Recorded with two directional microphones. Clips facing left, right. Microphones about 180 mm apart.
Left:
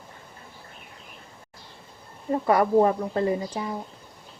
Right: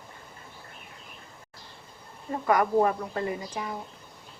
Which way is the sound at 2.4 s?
30° left (ahead or behind).